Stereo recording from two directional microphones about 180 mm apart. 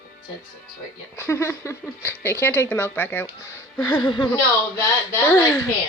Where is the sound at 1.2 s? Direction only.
15° left (ahead or behind).